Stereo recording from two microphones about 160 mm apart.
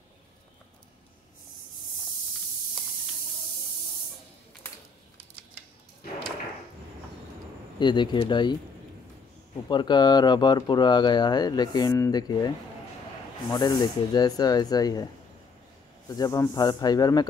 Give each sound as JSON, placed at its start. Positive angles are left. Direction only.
{"t": 7.8, "sound": "speech", "side_deg": 30}
{"t": 9.7, "sound": "speech", "side_deg": 30}
{"t": 13.5, "sound": "speech", "side_deg": 25}
{"t": 16.1, "sound": "speech", "side_deg": 25}